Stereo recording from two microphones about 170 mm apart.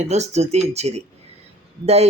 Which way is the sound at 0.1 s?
40° right (ahead or behind).